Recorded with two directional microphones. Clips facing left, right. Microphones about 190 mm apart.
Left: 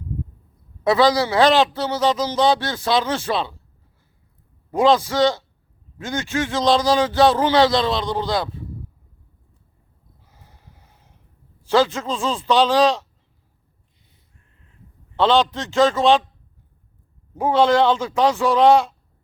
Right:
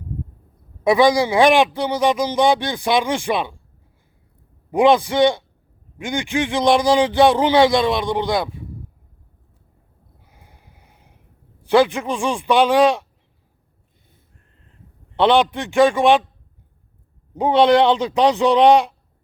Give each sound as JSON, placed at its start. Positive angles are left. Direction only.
{"t": 0.9, "sound": "a man's voice", "side_deg": -15}
{"t": 4.7, "sound": "a man's voice", "side_deg": -15}
{"t": 10.3, "sound": "boat", "side_deg": -15}
{"t": 11.7, "sound": "a man's voice", "side_deg": -15}
{"t": 15.2, "sound": "a man's voice", "side_deg": -15}
{"t": 17.3, "sound": "a man's voice", "side_deg": -20}